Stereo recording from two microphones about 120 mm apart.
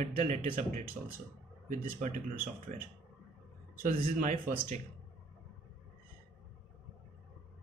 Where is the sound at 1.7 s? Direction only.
90° right.